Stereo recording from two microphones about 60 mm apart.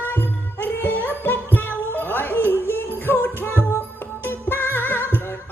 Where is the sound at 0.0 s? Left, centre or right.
Left.